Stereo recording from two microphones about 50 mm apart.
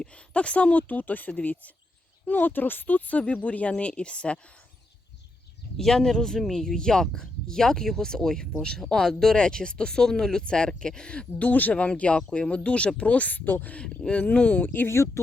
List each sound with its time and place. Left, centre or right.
0.0 s a woman's voice: left
5.7 s a woman's voice: centre; by 13.7 s left
14.1 s speech: left
14.6 s speech: left
14.8 s speech: left